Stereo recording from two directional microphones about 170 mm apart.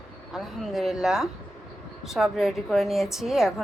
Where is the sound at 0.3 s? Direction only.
Centre (ahead or behind).